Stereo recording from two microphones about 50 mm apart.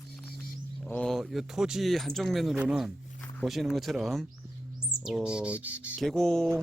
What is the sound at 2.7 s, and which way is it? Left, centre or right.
Speech, centre.